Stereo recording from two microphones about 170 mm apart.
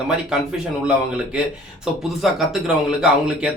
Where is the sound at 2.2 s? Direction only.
Centre (ahead or behind).